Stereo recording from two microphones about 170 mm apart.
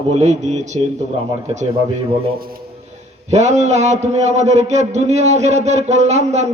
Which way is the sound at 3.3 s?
45° right (ahead or behind).